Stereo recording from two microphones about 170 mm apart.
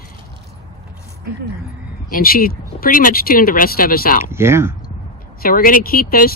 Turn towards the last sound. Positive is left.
turn(degrees=60)  # may be behind; listen again after turning